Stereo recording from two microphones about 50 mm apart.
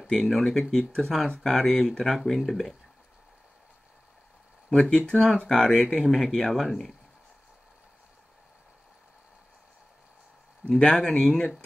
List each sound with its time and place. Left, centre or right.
0.1 s speech: centre
4.6 s speech: centre
4.9 s speech: left
5.5 s speech: centre
10.9 s speech: centre